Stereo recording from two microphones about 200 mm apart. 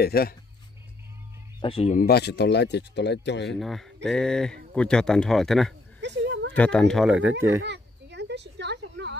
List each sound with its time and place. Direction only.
0.0 s speech: 50° left (ahead or behind)
1.6 s speech: 30° left (ahead or behind)
2.0 s speech: 55° left (ahead or behind)
3.4 s speech: centre (ahead or behind)
5.9 s a sound: 60° right (ahead or behind)
6.5 s speech: 5° left (ahead or behind)
7.6 s a sound: 60° right (ahead or behind)